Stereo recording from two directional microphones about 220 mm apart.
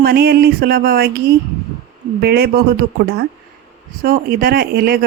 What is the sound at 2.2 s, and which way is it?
Speech, 45° right (ahead or behind).